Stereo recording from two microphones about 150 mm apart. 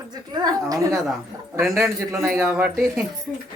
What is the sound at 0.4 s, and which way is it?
Speech, 25° right (ahead or behind).